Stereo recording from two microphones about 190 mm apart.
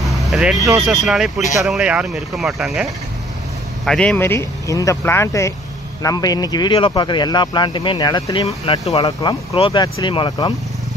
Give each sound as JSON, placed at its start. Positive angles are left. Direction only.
{"t": 0.0, "sound": "vehicle", "side_deg": 0}
{"t": 0.8, "sound": "speech", "side_deg": 0}